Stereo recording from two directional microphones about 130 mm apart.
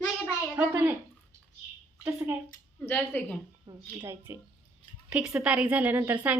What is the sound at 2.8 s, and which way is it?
Speech, 15° left (ahead or behind).